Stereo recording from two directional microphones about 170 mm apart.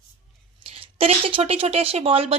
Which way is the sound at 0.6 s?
35° right (ahead or behind).